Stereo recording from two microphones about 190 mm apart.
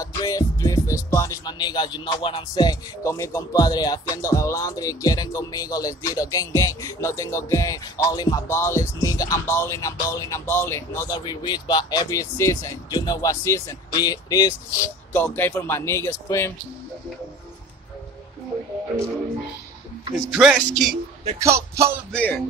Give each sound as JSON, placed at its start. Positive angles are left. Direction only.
{"t": 0.0, "sound": "music", "side_deg": 20}
{"t": 20.2, "sound": "speech", "side_deg": -5}
{"t": 21.4, "sound": "speech", "side_deg": -15}
{"t": 22.1, "sound": "music", "side_deg": 10}